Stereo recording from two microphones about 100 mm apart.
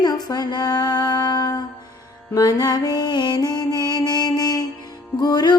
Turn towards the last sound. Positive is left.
turn(degrees=45)  # may be behind; listen again after turning